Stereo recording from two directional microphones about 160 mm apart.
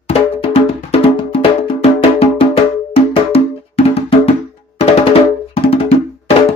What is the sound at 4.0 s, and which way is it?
Music, 40° left (ahead or behind).